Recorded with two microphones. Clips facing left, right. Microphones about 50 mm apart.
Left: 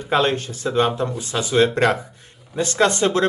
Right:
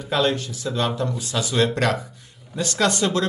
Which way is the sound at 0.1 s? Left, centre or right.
Left.